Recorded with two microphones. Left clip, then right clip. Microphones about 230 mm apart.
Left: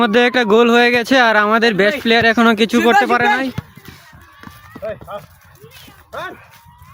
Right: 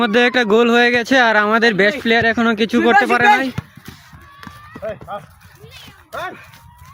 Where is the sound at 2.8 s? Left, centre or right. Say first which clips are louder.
Right 2 dB; centre.